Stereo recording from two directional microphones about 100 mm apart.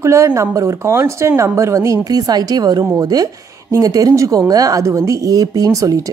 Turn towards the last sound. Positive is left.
turn(degrees=-35)  # may be behind; listen again after turning